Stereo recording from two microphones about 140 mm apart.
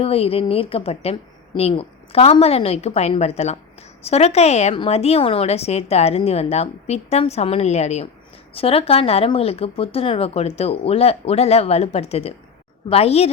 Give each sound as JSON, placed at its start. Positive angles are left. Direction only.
{"t": 0.0, "sound": "speech", "side_deg": 45}